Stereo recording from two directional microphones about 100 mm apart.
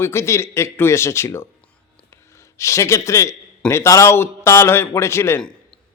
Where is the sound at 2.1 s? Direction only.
30° left (ahead or behind).